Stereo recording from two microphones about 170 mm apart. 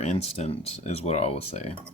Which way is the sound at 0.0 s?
40° left (ahead or behind).